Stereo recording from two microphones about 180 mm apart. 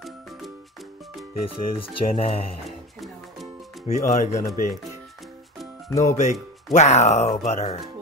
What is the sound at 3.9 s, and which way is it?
Speech, 40° left (ahead or behind).